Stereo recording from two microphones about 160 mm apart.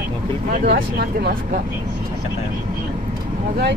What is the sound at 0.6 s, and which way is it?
Speech, 90° right.